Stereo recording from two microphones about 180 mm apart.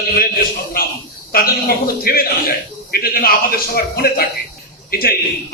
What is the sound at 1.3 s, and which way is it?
Speech, 55° left (ahead or behind).